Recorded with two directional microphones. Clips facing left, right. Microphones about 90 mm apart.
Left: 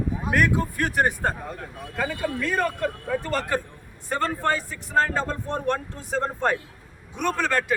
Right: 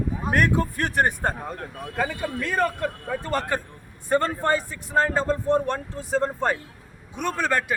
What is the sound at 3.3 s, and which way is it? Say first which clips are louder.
A man's voice: even; 20° right (ahead or behind).